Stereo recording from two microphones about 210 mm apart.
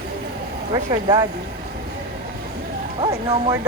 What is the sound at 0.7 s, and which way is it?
Speech, 20° right (ahead or behind).